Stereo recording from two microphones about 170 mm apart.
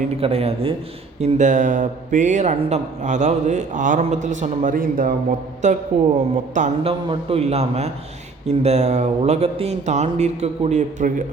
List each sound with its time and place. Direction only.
0.2 s speech: 35° right (ahead or behind)
1.2 s speech: 45° right (ahead or behind)
5.6 s speech: 45° right (ahead or behind)
7.1 s speech: 35° right (ahead or behind)